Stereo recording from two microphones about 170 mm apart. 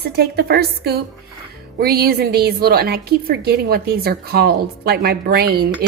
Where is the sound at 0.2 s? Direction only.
65° right (ahead or behind).